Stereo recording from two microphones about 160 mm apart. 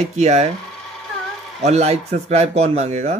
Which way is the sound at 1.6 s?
45° right (ahead or behind).